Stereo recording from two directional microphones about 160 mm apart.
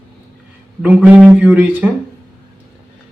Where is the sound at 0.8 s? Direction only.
10° right (ahead or behind).